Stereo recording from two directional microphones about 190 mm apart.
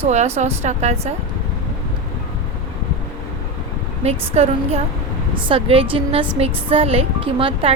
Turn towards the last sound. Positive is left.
turn(degrees=-30)  # may be behind; listen again after turning